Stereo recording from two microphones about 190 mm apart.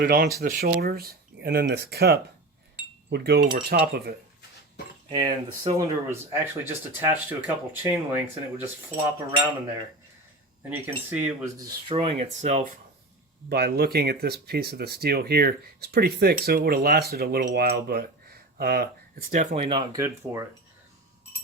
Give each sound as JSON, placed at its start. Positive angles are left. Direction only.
{"t": 0.0, "sound": "speech", "side_deg": -50}
{"t": 5.0, "sound": "speech", "side_deg": -20}
{"t": 10.7, "sound": "speech", "side_deg": -10}
{"t": 13.5, "sound": "speech", "side_deg": -55}
{"t": 19.3, "sound": "speech", "side_deg": -40}